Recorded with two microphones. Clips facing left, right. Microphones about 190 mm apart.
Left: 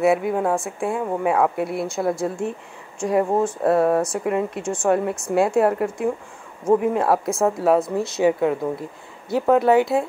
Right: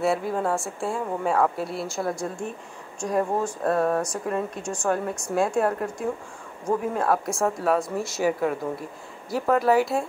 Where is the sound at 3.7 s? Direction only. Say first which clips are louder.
Left 5 dB; 10° left (ahead or behind).